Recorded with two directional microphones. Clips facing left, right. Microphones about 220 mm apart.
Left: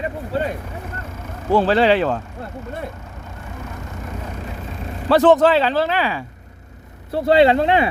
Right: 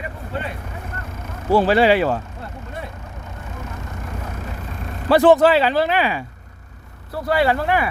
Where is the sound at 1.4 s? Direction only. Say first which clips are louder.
Even; 10° right (ahead or behind).